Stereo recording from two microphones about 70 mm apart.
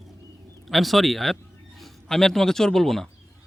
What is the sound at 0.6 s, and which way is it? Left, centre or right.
A man's voice, centre.